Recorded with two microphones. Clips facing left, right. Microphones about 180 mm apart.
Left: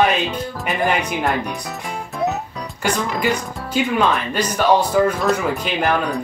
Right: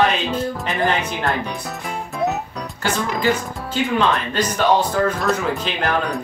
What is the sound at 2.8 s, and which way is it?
Speech, 10° left (ahead or behind).